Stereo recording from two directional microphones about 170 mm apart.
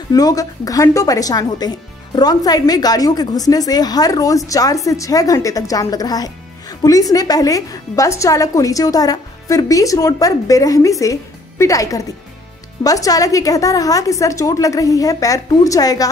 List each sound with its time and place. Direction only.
0.1 s a woman's voice: 20° left (ahead or behind)